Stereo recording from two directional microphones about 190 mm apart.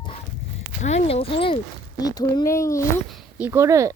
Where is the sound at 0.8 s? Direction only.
35° left (ahead or behind); by 2.8 s 15° left (ahead or behind).